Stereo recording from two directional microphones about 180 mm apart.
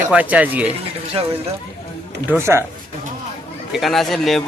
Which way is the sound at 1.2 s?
30° right (ahead or behind).